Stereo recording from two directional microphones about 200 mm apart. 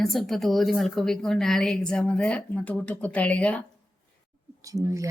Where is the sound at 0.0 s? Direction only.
Centre (ahead or behind).